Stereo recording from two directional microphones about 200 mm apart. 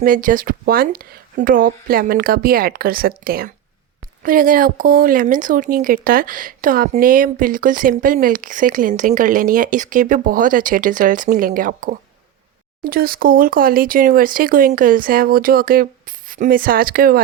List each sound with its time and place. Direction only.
0.0 s speech: 45° right (ahead or behind)